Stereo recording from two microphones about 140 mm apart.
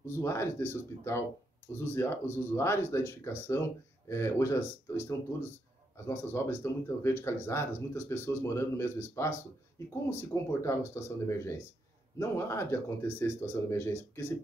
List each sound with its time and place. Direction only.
0.0 s speech: 20° left (ahead or behind)
6.0 s speech: 20° left (ahead or behind)